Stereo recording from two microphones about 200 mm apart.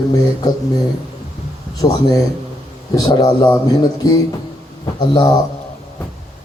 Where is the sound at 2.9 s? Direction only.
20° left (ahead or behind).